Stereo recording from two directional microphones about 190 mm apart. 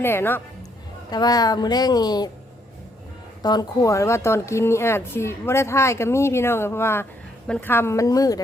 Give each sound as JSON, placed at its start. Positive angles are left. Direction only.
{"t": 0.0, "sound": "speech", "side_deg": 10}
{"t": 3.4, "sound": "speech", "side_deg": 20}